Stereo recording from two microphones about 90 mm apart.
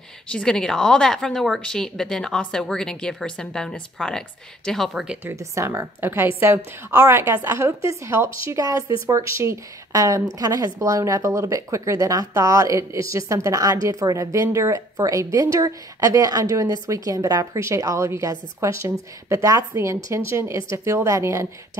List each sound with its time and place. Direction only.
0.3 s speech: 10° left (ahead or behind)
5.3 s a woman's voice: 35° right (ahead or behind)